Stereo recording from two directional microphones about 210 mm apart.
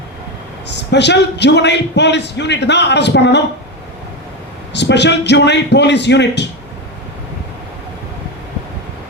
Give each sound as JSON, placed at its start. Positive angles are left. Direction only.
{"t": 0.7, "sound": "a man's voice", "side_deg": 55}
{"t": 4.7, "sound": "a man's voice", "side_deg": 55}